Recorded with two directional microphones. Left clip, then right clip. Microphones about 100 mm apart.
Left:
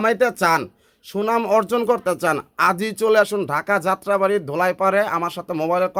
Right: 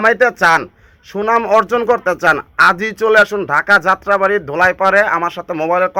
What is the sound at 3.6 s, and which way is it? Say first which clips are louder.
Speech: right 11 dB; 50° left (ahead or behind).